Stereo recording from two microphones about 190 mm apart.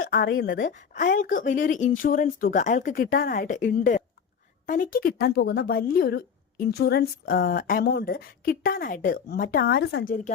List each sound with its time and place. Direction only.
0.0 s speech: 50° left (ahead or behind); by 0.6 s 70° left (ahead or behind)
0.6 s speech: 45° left (ahead or behind)